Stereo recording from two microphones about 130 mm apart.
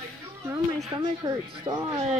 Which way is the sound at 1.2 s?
35° right (ahead or behind).